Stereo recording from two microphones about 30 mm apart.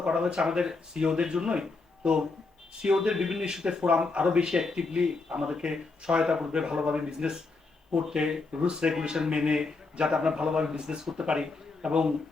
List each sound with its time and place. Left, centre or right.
0.0 s speech: right
4.4 s speech: right
8.9 s a man's voice: centre